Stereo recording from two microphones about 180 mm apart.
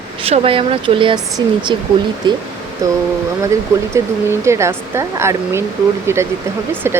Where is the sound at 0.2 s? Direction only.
30° right (ahead or behind).